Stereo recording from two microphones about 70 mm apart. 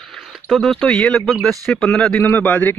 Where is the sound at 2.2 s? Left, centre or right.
Left.